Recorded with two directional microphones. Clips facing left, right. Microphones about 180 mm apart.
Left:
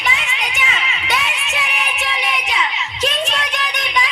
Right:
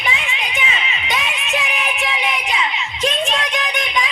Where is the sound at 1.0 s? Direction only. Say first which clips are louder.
Left 1 dB; 75° left (ahead or behind).